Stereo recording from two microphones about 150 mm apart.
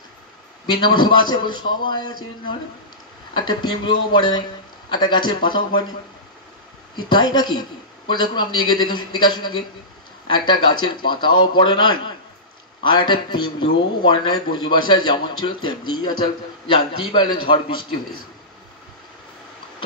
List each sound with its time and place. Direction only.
0.7 s a man's voice: 30° left (ahead or behind)
3.3 s a man's voice: 30° left (ahead or behind)
7.0 s a man's voice: 30° left (ahead or behind)